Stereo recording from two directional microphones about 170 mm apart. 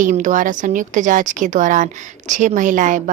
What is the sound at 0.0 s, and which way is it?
A woman's voice, 50° right (ahead or behind).